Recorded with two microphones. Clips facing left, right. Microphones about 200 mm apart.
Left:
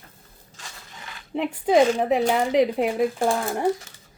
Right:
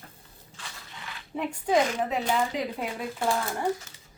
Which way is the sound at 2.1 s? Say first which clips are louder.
Left 7 dB; 75° left (ahead or behind).